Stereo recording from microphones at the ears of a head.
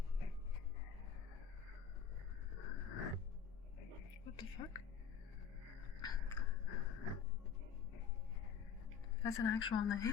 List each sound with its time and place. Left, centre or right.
2.6 s a sound: left
6.0 s biting: left
9.2 s speech: left